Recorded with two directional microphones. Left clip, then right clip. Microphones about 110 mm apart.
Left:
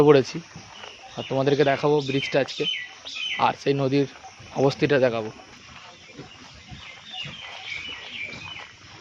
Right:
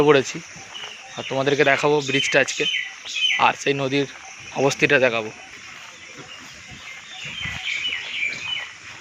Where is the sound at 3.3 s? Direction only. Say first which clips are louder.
Right 1 dB; 15° left (ahead or behind).